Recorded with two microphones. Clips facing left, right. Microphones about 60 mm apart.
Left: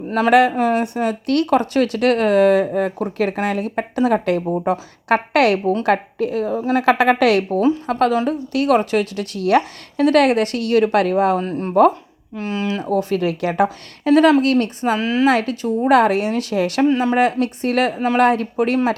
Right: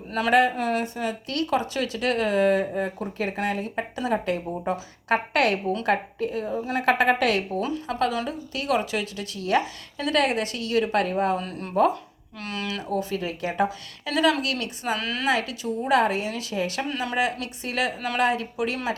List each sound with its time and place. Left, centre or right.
0.3 s a woman's voice: left
0.5 s a woman's voice: left
6.7 s a woman's voice: left
7.9 s speech: left
8.3 s speech: left
11.3 s a woman's voice: left
12.3 s speech: left
12.8 s speech: left
14.0 s a woman's voice: left
14.9 s speech: left
15.3 s speech: left
17.4 s speech: left